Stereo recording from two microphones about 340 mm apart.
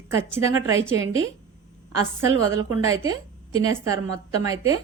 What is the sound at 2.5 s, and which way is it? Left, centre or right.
Speech, centre.